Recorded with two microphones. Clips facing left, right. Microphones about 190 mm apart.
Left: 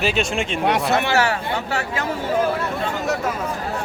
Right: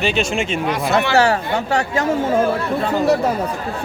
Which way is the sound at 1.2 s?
40° right (ahead or behind).